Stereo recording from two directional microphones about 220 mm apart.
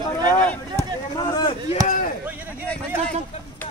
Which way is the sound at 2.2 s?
10° right (ahead or behind).